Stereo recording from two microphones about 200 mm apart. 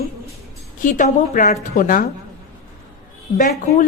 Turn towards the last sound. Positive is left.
turn(degrees=35)  # may be behind; listen again after turning